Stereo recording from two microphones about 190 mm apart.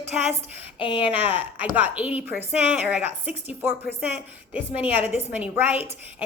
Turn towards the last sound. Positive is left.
turn(degrees=-10)  # may be behind; listen again after turning